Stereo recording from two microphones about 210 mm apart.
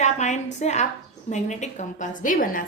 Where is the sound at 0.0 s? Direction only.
35° left (ahead or behind).